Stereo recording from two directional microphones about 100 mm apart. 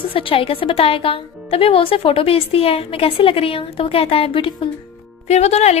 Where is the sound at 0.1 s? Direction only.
65° left (ahead or behind).